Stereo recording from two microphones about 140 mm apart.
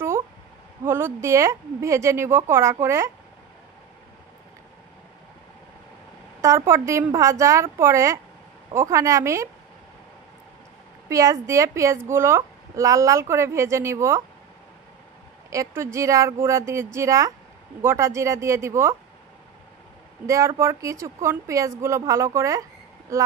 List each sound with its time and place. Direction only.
0.8 s a woman's voice: 15° right (ahead or behind)
6.4 s a woman's voice: 20° right (ahead or behind)
11.1 s a woman's voice: 25° right (ahead or behind)
15.5 s a woman's voice: 20° right (ahead or behind)
20.2 s a woman's voice: 20° right (ahead or behind)